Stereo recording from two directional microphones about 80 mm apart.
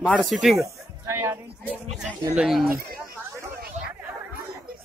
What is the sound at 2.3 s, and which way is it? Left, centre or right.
Speech, centre.